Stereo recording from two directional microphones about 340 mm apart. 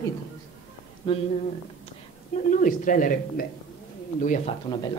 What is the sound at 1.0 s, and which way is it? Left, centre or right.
Speech, centre.